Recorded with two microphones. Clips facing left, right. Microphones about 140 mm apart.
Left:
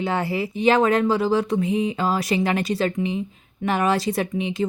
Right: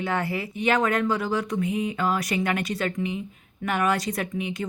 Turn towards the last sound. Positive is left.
turn(degrees=25)  # may be behind; listen again after turning